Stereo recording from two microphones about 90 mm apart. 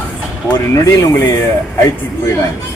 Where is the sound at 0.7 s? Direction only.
35° left (ahead or behind).